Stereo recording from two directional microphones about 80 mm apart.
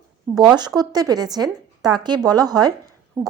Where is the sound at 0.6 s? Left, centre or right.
Right.